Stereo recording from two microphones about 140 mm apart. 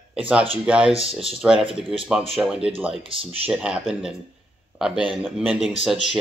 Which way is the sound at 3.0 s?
40° right (ahead or behind).